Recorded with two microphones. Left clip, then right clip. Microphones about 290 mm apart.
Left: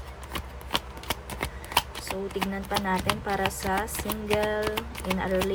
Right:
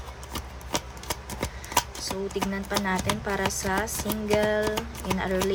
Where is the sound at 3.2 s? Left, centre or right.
Centre.